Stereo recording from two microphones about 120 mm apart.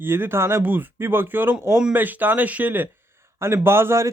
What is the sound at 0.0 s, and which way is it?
A man's voice, 20° right (ahead or behind).